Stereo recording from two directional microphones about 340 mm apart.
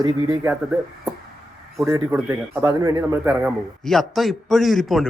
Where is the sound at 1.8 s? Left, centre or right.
Centre.